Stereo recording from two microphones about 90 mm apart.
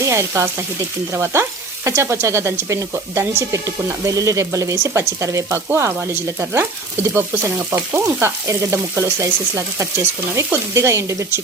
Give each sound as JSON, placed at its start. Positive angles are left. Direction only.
{"t": 0.1, "sound": "speech", "side_deg": -30}